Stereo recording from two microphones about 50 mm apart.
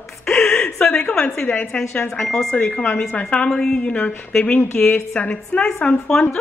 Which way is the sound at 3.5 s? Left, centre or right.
Centre.